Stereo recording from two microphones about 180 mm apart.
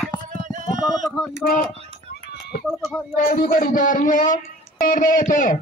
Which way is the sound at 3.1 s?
50° left (ahead or behind).